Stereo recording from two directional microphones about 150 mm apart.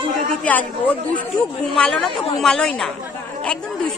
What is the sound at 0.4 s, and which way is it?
A woman's voice, 10° left (ahead or behind).